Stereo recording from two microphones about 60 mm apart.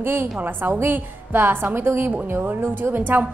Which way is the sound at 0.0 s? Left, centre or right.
Right.